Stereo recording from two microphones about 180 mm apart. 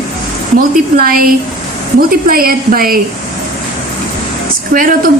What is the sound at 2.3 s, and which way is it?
Speech, 55° right (ahead or behind).